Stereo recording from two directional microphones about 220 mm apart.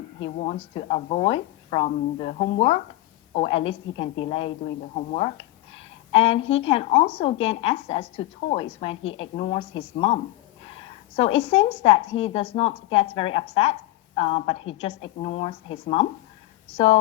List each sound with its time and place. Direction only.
0.3 s a woman's voice: 30° left (ahead or behind)
11.2 s a woman's voice: 25° left (ahead or behind)